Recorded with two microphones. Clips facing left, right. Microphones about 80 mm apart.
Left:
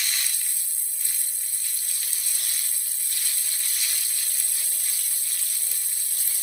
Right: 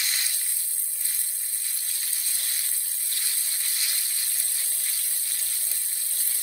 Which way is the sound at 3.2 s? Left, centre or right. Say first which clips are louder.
Even; centre.